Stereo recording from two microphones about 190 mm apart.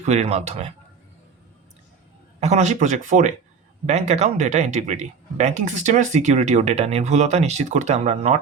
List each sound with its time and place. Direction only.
0.0 s speech: 35° right (ahead or behind)
2.4 s speech: 35° right (ahead or behind)